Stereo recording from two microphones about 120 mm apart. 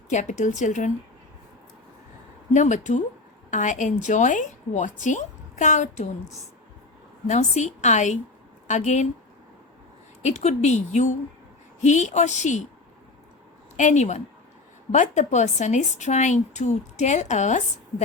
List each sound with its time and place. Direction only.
0.1 s a woman's voice: 90° left
2.5 s a woman's voice: 90° left
7.3 s a woman's voice: 80° left
10.2 s a woman's voice: 70° left (ahead or behind)
13.7 s speech: 85° left
14.9 s speech: 90° left